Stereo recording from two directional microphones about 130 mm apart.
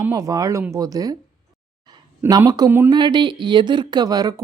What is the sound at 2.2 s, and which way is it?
Speech, 15° right (ahead or behind).